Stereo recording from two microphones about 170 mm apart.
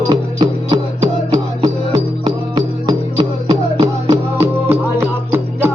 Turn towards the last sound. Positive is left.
turn(degrees=-15)  # may be behind; listen again after turning